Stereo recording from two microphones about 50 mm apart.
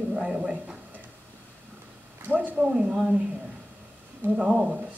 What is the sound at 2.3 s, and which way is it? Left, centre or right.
Speech, right.